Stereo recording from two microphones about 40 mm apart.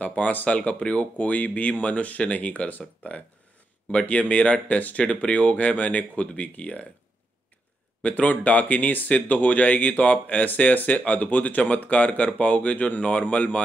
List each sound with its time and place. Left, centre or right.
0.0 s speech: left
4.0 s speech: left
8.0 s speech: left